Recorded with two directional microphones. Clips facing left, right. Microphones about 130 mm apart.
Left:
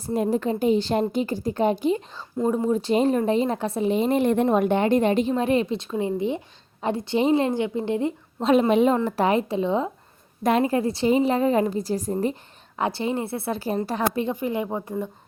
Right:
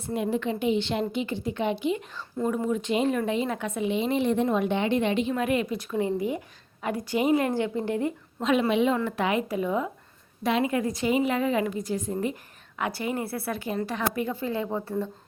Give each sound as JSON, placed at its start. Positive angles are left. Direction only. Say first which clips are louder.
{"t": 0.0, "sound": "speech", "louder": "left 4 dB", "side_deg": 40}
{"t": 2.4, "sound": "speech", "louder": "left 4 dB", "side_deg": 25}
{"t": 5.3, "sound": "a woman's voice", "louder": "left 4 dB", "side_deg": 30}
{"t": 8.4, "sound": "a woman's voice", "louder": "left 5 dB", "side_deg": 35}
{"t": 10.4, "sound": "a woman's voice", "louder": "left 4 dB", "side_deg": 45}
{"t": 10.7, "sound": "speech", "louder": "left 4 dB", "side_deg": 30}
{"t": 14.3, "sound": "speech", "louder": "left 3 dB", "side_deg": 15}